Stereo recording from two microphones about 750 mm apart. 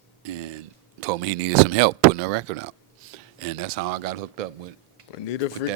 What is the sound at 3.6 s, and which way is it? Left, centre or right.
Speech, right.